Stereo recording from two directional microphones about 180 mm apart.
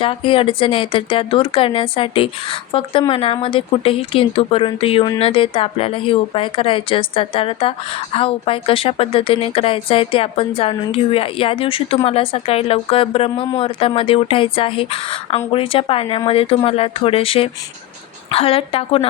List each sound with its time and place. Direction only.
0.0 s speech: 30° left (ahead or behind)